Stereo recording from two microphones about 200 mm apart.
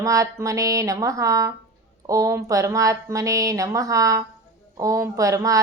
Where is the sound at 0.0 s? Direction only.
15° right (ahead or behind).